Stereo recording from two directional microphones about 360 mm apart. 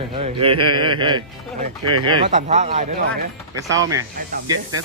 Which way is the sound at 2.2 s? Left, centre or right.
Centre.